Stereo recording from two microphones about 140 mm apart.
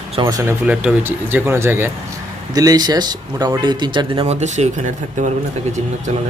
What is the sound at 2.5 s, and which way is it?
Speech, 25° right (ahead or behind).